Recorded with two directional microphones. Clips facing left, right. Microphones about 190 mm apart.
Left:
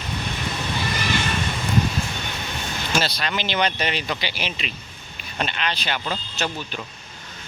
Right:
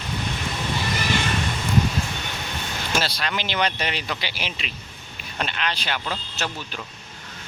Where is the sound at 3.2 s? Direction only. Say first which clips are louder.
Left 1 dB; 5° right (ahead or behind).